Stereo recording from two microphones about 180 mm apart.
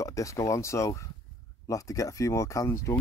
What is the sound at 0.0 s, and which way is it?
Speech, 15° left (ahead or behind).